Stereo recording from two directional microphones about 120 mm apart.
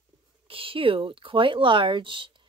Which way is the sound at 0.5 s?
50° right (ahead or behind).